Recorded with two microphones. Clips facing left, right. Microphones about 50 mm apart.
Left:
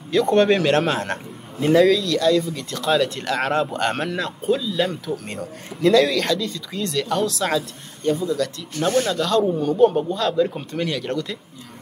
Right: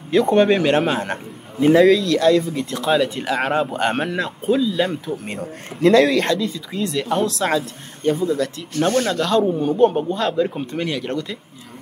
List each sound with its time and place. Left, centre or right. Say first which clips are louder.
0.1 s speech: right 2 dB; centre
2.0 s speech: right 3 dB; right
2.5 s speech: right 2 dB; centre
5.4 s a man's voice: right 3 dB; right
6.2 s speech: right 2 dB; centre
7.4 s speech: right 2 dB; right
9.4 s a man's voice: right 1 dB; centre
9.8 s speech: even; right
10.3 s speech: even; centre